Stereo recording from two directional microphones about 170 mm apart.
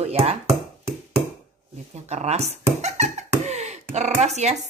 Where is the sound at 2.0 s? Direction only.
40° right (ahead or behind).